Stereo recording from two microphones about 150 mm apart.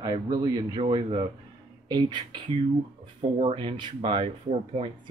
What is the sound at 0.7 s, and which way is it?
Speech, 35° right (ahead or behind).